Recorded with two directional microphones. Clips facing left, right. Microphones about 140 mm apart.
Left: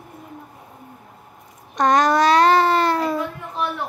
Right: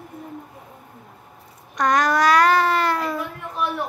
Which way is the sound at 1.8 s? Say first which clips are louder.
Left 3 dB; 25° left (ahead or behind).